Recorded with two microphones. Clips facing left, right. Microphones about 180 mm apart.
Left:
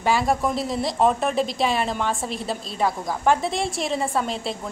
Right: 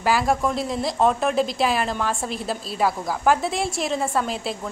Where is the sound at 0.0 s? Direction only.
Centre (ahead or behind).